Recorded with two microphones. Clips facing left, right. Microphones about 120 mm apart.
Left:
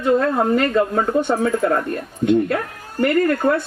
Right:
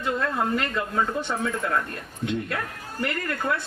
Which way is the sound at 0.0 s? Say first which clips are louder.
Left 9 dB; 45° left (ahead or behind).